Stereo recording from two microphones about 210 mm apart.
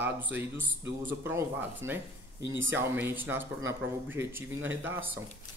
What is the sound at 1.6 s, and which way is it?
A man's voice, 10° right (ahead or behind).